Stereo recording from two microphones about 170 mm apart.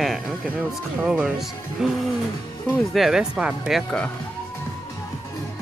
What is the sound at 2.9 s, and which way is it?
Speech, centre (ahead or behind).